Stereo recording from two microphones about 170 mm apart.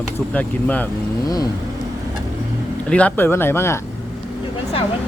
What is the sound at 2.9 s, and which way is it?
Speech, 10° left (ahead or behind).